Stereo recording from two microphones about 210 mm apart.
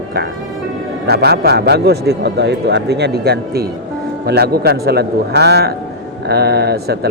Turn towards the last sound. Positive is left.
turn(degrees=-50)  # may be behind; listen again after turning